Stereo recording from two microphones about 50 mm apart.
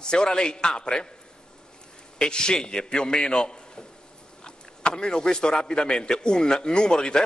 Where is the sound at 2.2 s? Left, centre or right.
Centre.